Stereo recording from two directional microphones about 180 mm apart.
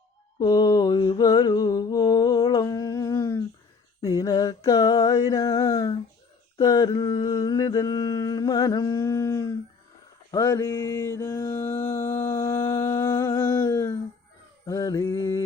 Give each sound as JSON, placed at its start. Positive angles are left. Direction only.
{"t": 0.3, "sound": "mantra", "side_deg": 20}
{"t": 4.0, "sound": "a sound", "side_deg": 20}
{"t": 6.6, "sound": "humming", "side_deg": 20}
{"t": 10.3, "sound": "mantra", "side_deg": 15}
{"t": 13.5, "sound": "a sound", "side_deg": 15}
{"t": 14.7, "sound": "mantra", "side_deg": 20}